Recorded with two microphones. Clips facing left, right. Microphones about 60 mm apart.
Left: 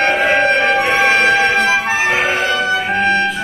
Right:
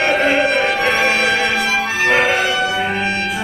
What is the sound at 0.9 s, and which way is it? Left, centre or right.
Music, left.